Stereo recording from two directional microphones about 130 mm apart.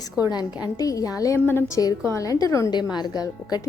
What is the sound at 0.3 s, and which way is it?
A woman's voice, 30° left (ahead or behind).